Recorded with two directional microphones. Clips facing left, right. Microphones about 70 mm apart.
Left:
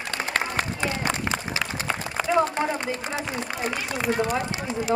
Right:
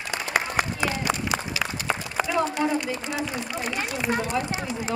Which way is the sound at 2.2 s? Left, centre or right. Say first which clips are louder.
Left 4 dB; left.